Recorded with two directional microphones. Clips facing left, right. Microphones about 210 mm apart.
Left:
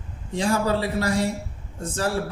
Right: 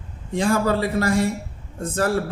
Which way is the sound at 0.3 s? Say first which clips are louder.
Right 3 dB; 50° right (ahead or behind).